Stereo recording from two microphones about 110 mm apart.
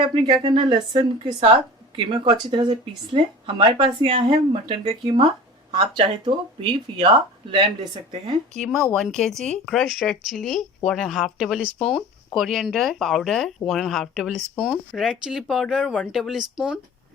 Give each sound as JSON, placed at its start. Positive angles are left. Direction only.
{"t": 0.0, "sound": "speech", "side_deg": -55}
{"t": 8.5, "sound": "speech", "side_deg": 0}